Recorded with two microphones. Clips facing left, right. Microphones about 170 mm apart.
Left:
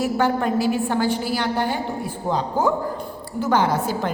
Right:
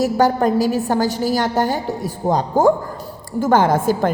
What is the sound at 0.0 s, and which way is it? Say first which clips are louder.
A woman's voice: right 5 dB; 40° right (ahead or behind).